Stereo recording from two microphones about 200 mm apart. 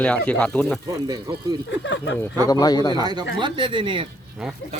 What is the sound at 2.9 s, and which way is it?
Speech, 20° right (ahead or behind).